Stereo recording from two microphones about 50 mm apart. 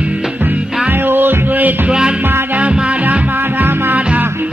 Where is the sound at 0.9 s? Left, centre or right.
Right.